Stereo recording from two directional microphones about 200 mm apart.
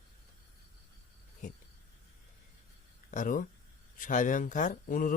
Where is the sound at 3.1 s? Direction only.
40° left (ahead or behind).